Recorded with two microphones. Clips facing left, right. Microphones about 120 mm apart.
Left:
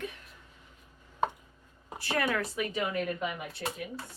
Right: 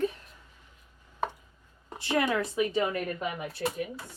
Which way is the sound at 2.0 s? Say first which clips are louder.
Right 3 dB; 20° right (ahead or behind).